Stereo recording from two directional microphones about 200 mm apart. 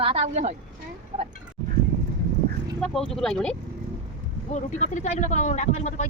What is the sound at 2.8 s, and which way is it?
Speech, 5° left (ahead or behind).